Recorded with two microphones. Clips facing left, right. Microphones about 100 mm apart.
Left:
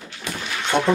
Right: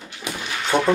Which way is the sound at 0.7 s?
40° right (ahead or behind).